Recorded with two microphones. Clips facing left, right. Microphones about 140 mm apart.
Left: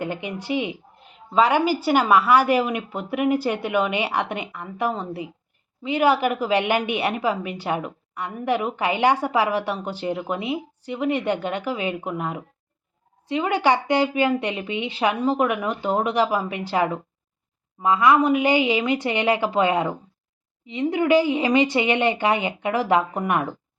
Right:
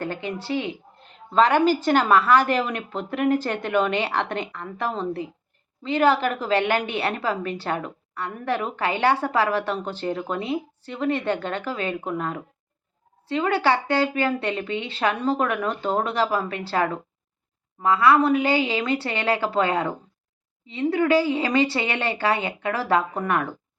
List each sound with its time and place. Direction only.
0.0 s a woman's voice: 15° left (ahead or behind)